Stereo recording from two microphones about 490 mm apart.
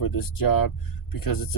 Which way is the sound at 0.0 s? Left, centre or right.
Left.